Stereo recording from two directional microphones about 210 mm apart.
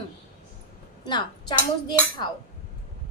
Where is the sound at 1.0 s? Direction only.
20° left (ahead or behind).